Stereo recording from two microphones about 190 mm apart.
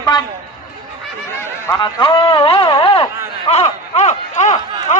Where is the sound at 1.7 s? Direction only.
20° left (ahead or behind).